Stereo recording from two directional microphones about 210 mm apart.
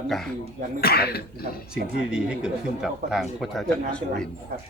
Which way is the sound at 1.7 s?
5° right (ahead or behind).